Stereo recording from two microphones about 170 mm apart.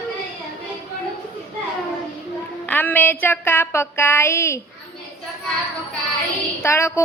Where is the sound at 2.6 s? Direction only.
10° left (ahead or behind).